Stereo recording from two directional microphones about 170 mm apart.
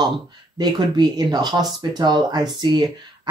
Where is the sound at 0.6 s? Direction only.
25° right (ahead or behind).